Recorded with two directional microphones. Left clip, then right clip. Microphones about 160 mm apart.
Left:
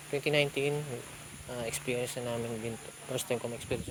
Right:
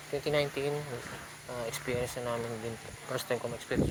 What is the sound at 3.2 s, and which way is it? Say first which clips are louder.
Speech: even; 35° left (ahead or behind).